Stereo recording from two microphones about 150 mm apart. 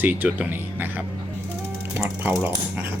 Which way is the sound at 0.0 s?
10° right (ahead or behind).